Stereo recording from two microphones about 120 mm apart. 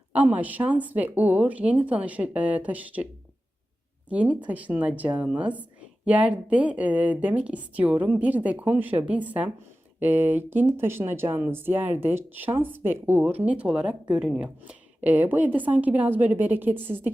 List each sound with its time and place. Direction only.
0.1 s speech: 10° right (ahead or behind)
4.1 s speech: 10° right (ahead or behind)